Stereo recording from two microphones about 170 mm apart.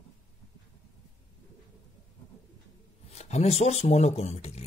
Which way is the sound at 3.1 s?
40° left (ahead or behind).